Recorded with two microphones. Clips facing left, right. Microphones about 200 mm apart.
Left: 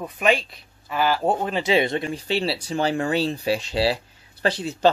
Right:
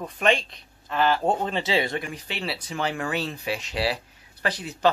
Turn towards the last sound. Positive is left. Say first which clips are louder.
# left 5 dB
turn(degrees=30)  # may be behind; listen again after turning